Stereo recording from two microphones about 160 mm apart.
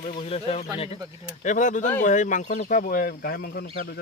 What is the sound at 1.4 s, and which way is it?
Speech, 50° left (ahead or behind).